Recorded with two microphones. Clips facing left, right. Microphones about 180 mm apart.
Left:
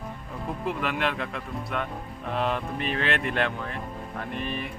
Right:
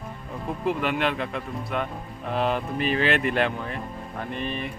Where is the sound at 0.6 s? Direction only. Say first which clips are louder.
Right 4 dB; centre (ahead or behind).